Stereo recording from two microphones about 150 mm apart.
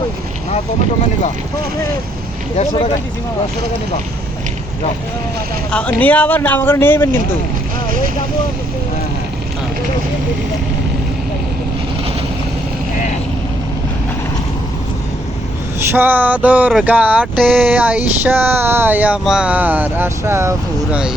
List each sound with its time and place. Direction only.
2.6 s speech: 40° left (ahead or behind)
5.7 s speech: 10° left (ahead or behind)
15.9 s a sound: 10° right (ahead or behind)